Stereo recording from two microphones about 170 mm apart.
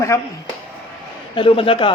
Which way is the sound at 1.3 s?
30° left (ahead or behind).